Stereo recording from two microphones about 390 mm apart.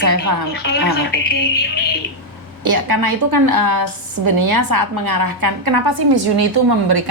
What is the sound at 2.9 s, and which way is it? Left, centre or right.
A woman's voice, right.